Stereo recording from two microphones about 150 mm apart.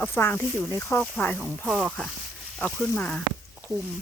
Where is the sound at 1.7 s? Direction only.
5° right (ahead or behind).